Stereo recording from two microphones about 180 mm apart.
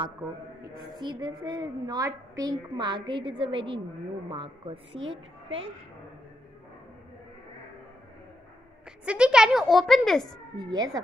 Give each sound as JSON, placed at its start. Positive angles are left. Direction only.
{"t": 0.7, "sound": "a woman's voice", "side_deg": -25}
{"t": 9.0, "sound": "a woman's voice", "side_deg": -5}
{"t": 10.6, "sound": "a woman's voice", "side_deg": -20}